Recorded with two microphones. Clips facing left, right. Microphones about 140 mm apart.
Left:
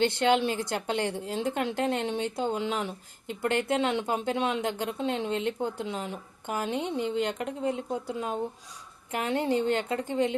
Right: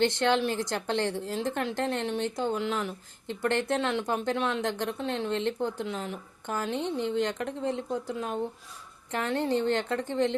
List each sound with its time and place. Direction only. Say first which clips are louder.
0.0 s a woman's voice: left 1 dB; 10° left (ahead or behind)